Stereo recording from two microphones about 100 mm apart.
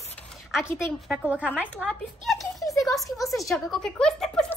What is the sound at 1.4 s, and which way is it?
Speech, 15° left (ahead or behind).